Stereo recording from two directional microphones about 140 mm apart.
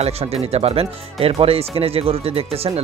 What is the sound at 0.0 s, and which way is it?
Speech, 45° right (ahead or behind).